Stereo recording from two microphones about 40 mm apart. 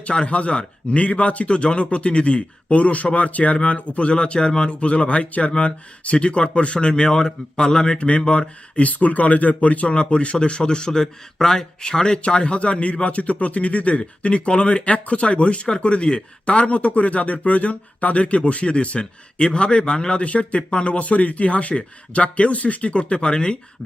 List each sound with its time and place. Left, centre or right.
0.0 s speech: left